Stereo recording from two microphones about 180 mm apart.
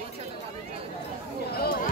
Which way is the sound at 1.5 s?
60° left (ahead or behind).